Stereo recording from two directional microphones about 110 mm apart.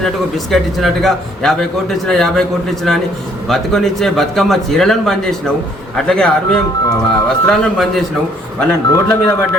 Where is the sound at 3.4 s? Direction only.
5° left (ahead or behind).